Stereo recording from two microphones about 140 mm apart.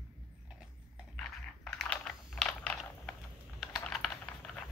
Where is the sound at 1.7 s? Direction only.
Centre (ahead or behind).